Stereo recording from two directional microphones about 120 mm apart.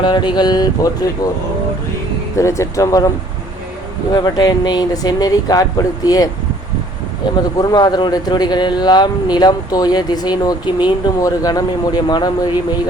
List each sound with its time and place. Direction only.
0.0 s speech: 40° left (ahead or behind)
2.4 s speech: 25° left (ahead or behind)
4.1 s speech: 35° left (ahead or behind)
7.6 s speech: 35° left (ahead or behind)